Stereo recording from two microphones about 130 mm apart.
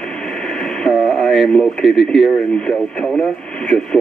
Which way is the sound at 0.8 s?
Centre (ahead or behind).